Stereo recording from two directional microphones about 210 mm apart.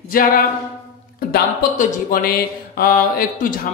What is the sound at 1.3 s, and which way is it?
Speech, 40° left (ahead or behind).